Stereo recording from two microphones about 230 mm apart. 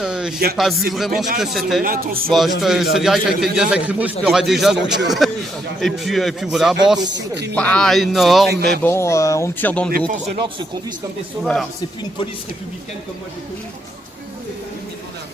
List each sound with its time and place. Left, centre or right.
0.0 s music: centre
0.5 s speech: centre
1.8 s speech: right
2.3 s speech: centre
8.4 s speech: right
8.8 s speech: centre
10.3 s speech: centre